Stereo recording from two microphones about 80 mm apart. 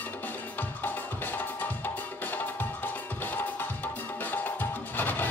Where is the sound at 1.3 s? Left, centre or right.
Left.